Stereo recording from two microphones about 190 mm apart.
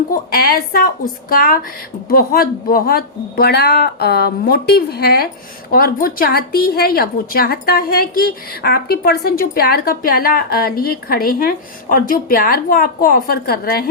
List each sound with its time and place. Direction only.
0.1 s a woman's voice: 50° left (ahead or behind)